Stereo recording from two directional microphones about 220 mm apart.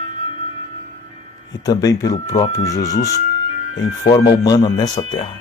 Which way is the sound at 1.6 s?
15° left (ahead or behind).